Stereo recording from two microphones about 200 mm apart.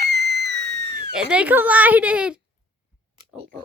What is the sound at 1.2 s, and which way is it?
Speech, 5° right (ahead or behind).